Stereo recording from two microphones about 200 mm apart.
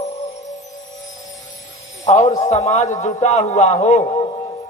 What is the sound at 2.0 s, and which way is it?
A man's voice, 35° left (ahead or behind).